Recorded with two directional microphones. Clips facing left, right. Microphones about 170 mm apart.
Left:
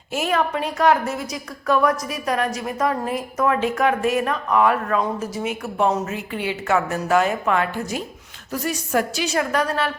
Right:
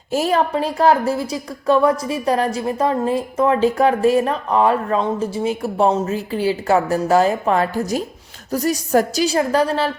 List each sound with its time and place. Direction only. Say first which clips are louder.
0.1 s a woman's voice: right 4 dB; 35° right (ahead or behind)